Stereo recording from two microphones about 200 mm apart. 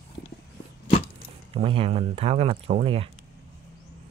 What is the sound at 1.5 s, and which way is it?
Speech, 30° right (ahead or behind).